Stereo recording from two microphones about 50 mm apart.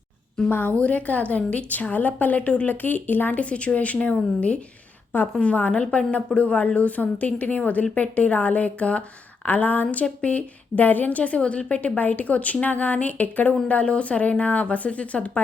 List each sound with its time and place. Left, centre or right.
0.8 s a woman's voice: left
3.4 s a woman's voice: left
9.5 s a woman's voice: left